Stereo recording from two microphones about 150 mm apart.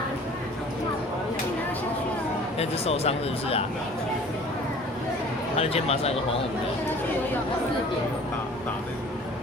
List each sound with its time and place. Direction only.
2.6 s speech: 45° left (ahead or behind)
5.5 s speech: 45° left (ahead or behind)